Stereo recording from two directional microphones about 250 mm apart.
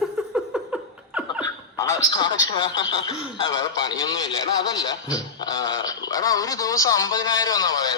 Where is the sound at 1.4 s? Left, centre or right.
Centre.